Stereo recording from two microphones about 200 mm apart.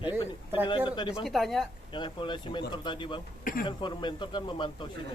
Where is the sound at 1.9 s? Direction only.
25° left (ahead or behind).